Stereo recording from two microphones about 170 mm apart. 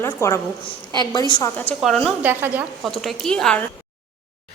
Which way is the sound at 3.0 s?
Centre (ahead or behind).